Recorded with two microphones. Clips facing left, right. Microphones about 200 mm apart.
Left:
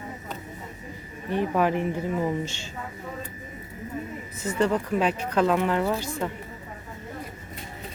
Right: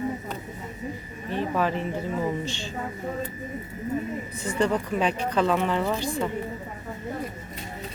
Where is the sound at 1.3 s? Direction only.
15° left (ahead or behind).